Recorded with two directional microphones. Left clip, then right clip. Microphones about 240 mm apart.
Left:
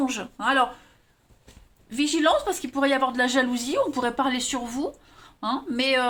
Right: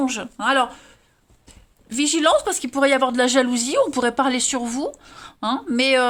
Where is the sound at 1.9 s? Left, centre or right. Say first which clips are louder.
Right 4 dB; right.